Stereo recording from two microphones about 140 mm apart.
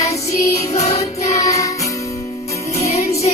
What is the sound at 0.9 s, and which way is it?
Music, 55° left (ahead or behind).